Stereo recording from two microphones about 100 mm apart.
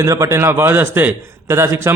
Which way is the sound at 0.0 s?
30° right (ahead or behind).